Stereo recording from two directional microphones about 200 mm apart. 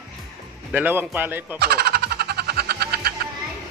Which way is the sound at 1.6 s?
50° right (ahead or behind).